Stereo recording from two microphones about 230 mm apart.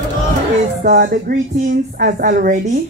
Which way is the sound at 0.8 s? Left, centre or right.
Right.